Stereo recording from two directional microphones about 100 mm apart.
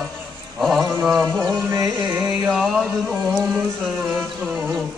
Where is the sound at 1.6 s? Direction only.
30° right (ahead or behind).